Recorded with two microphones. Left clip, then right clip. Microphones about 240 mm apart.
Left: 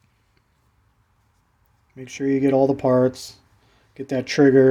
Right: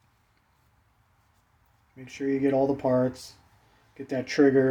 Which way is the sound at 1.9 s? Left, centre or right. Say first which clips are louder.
Left 6 dB; left.